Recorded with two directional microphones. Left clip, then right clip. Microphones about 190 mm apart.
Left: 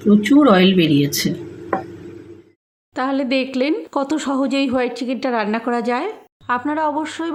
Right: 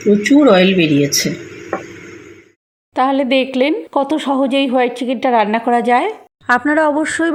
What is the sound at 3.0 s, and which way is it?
A woman's voice, centre (ahead or behind).